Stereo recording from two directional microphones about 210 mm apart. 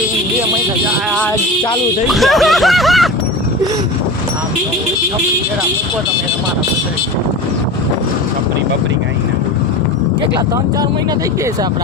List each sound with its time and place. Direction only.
2.0 s speech: centre (ahead or behind)